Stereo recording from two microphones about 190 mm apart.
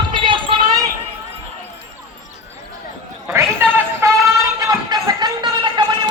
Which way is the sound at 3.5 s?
15° right (ahead or behind).